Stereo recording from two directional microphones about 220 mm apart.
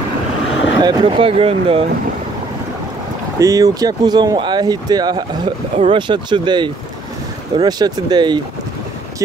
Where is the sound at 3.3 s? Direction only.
15° right (ahead or behind).